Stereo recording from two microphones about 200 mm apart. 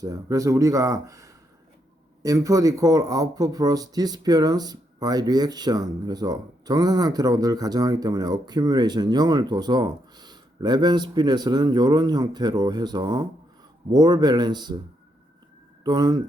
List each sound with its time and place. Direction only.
0.0 s speech: 15° right (ahead or behind)
15.8 s speech: 20° right (ahead or behind)